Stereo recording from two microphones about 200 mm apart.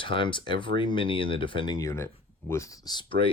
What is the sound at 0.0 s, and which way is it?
Speech, 25° left (ahead or behind).